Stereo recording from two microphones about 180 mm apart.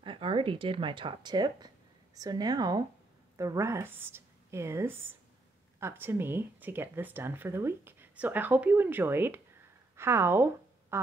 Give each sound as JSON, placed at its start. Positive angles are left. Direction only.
{"t": 0.0, "sound": "a woman's voice", "side_deg": -30}